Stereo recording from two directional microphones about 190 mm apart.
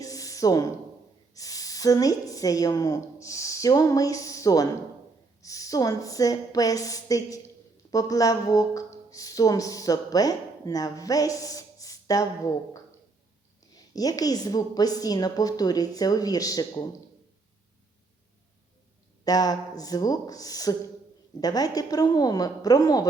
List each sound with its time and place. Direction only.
0.0 s a sound: 20° left (ahead or behind)
1.3 s a woman's voice: 20° left (ahead or behind)
13.7 s a woman's voice: 20° left (ahead or behind)
19.2 s a woman's voice: 20° left (ahead or behind)